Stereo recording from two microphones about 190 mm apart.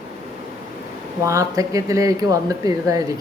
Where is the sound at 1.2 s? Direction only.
15° right (ahead or behind).